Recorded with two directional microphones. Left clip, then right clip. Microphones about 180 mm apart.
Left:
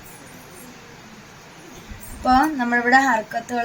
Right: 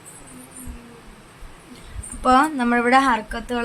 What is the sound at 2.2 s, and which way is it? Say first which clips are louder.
Speech: right 1 dB; 45° right (ahead or behind).